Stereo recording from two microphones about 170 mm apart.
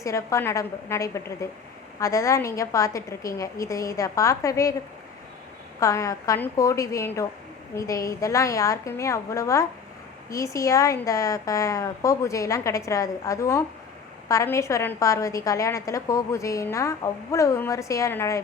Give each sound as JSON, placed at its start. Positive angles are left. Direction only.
{"t": 0.0, "sound": "a woman's voice", "side_deg": 20}
{"t": 5.8, "sound": "a woman's voice", "side_deg": 20}